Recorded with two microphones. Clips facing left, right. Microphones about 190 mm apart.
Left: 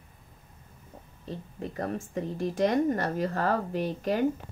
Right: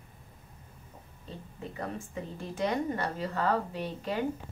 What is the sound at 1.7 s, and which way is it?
Speech, 45° left (ahead or behind).